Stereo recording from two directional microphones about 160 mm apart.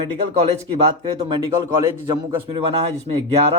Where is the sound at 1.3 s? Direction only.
25° right (ahead or behind).